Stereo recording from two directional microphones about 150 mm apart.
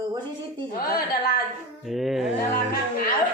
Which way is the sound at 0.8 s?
80° left.